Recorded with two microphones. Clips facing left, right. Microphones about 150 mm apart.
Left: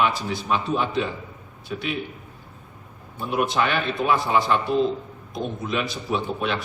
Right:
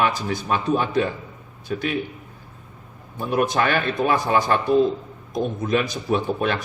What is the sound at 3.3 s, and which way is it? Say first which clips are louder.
Speech: right 2 dB; 45° right (ahead or behind).